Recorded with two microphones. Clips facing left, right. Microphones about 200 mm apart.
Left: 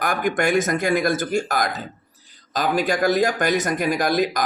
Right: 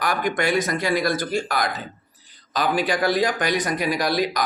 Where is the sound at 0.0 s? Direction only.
50° left (ahead or behind).